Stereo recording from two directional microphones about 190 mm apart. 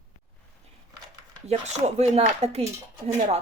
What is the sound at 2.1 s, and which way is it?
Speech, 35° right (ahead or behind).